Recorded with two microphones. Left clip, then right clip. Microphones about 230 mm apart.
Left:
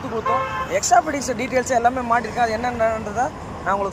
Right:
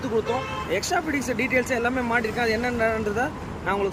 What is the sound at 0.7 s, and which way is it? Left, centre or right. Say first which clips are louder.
Speech: left 9 dB; centre.